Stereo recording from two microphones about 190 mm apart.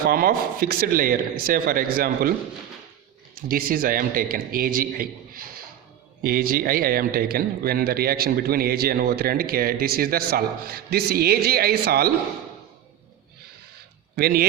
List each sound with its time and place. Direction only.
0.0 s speech: 50° right (ahead or behind)
3.3 s speech: 50° right (ahead or behind)
14.2 s speech: 50° right (ahead or behind)